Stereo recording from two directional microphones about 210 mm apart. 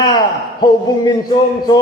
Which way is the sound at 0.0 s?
20° left (ahead or behind).